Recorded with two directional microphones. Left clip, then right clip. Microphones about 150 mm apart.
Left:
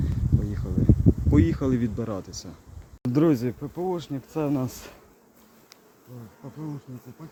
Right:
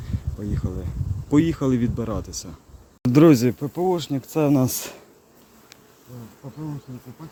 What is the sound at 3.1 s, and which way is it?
Speech, 70° right (ahead or behind).